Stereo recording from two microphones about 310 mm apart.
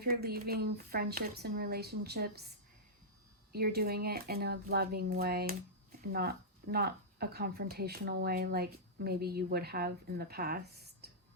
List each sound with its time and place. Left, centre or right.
0.0 s speech: right
3.5 s speech: right
11.0 s a sound: right